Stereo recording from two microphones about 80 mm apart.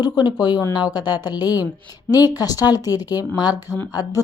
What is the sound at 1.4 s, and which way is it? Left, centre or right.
Speech, right.